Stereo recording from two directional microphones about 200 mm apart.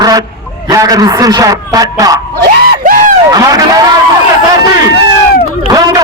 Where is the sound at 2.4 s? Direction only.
40° right (ahead or behind).